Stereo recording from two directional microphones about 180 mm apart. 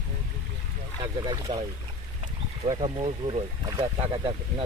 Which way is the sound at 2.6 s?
30° right (ahead or behind).